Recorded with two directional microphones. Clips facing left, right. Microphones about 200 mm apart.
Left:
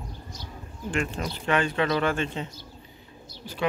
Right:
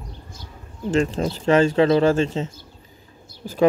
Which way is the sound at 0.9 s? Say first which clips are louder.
Right 9 dB; 30° right (ahead or behind).